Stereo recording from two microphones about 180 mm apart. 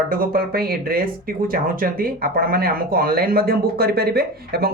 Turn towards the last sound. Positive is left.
turn(degrees=-60)  # may be behind; listen again after turning